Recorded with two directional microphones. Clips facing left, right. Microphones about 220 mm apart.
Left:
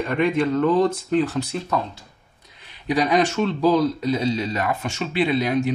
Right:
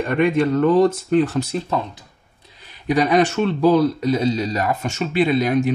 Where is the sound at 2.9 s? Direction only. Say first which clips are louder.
Right 3 dB; 50° right (ahead or behind).